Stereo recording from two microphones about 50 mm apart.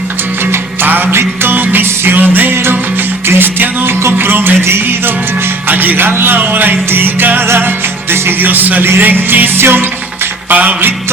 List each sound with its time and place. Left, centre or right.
0.5 s music: right
5.6 s music: right
6.1 s music: right
8.8 s music: right
10.5 s music: right